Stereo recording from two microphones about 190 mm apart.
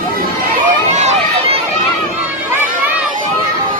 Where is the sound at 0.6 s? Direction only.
35° right (ahead or behind).